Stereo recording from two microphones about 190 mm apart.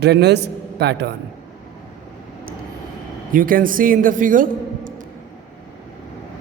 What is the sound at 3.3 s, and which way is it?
A man's voice, 45° right (ahead or behind).